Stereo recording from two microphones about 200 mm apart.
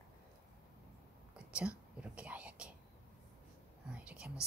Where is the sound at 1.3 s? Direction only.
5° right (ahead or behind).